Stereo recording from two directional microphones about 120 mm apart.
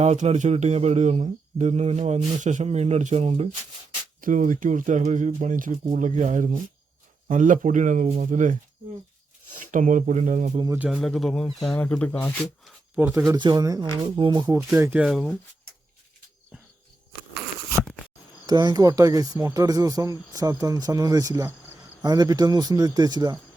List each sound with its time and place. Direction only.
0.0 s speech: 70° right (ahead or behind)
4.3 s speech: 90° right
9.7 s speech: 90° right
10.9 s speech: 5° left (ahead or behind)
13.0 s speech: 15° right (ahead or behind)
13.3 s speech: 40° right (ahead or behind)
14.7 s speech: 20° right (ahead or behind)
15.0 s speech: centre (ahead or behind)
18.4 s speech: 30° right (ahead or behind)